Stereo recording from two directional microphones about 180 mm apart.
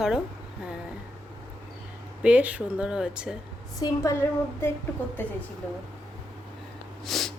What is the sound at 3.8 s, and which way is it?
A woman's voice, 15° left (ahead or behind).